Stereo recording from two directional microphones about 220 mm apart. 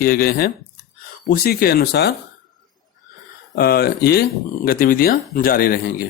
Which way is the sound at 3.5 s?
45° left (ahead or behind).